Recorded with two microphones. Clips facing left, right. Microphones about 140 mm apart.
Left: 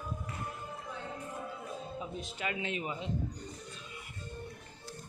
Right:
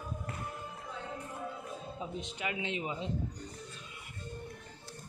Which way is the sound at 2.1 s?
20° right (ahead or behind).